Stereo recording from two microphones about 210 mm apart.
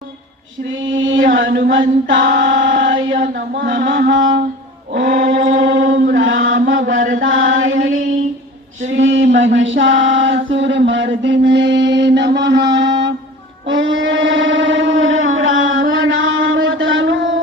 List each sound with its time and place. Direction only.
0.9 s chant: 65° right (ahead or behind); by 1.7 s 50° right (ahead or behind)
1.7 s chant: 65° right (ahead or behind)
3.1 s mantra: 50° right (ahead or behind)
4.9 s chant: 45° right (ahead or behind)
5.7 s chant: 65° right (ahead or behind)
6.2 s mantra: 70° right (ahead or behind)
7.1 s chant: 70° right (ahead or behind)
8.9 s a sound: 65° right (ahead or behind)
13.7 s music: 60° right (ahead or behind)
15.9 s mantra: 75° right (ahead or behind)